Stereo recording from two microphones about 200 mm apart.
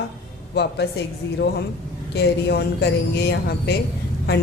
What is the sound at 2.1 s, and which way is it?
A woman's voice, 55° left (ahead or behind).